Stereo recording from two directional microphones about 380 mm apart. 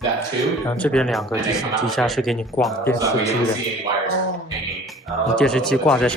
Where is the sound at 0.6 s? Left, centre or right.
Centre.